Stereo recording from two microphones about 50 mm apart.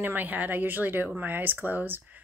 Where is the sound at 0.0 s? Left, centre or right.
Right.